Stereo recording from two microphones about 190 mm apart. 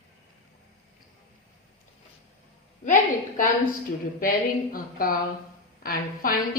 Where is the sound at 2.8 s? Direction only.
45° left (ahead or behind).